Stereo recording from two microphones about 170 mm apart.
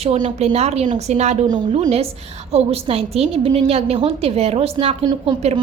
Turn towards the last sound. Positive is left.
turn(degrees=-35)  # may be behind; listen again after turning